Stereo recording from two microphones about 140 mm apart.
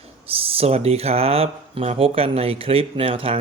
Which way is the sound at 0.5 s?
45° right (ahead or behind).